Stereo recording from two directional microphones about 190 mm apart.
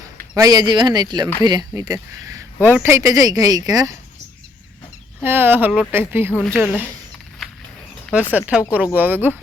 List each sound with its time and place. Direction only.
0.3 s speech: 20° right (ahead or behind)
5.2 s speech: 10° right (ahead or behind)
6.3 s speech: 10° left (ahead or behind)
6.6 s speech: 10° right (ahead or behind)
7.4 s a sound: centre (ahead or behind)
8.1 s speech: 10° right (ahead or behind)